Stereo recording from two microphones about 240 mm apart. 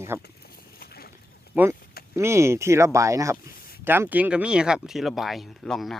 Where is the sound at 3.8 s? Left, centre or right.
Centre.